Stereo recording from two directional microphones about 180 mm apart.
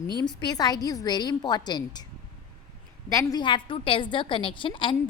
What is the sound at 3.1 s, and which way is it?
A woman's voice, 20° left (ahead or behind).